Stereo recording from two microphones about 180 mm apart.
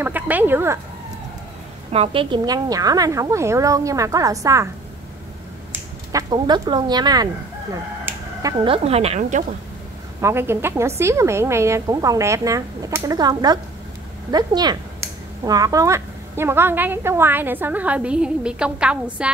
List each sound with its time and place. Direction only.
0.0 s speech: 10° right (ahead or behind)
1.9 s a woman's voice: 30° right (ahead or behind)
6.3 s a woman's voice: 25° right (ahead or behind)
8.0 s chicken: 20° right (ahead or behind)
8.6 s speech: 30° right (ahead or behind)
10.2 s speech: 15° right (ahead or behind)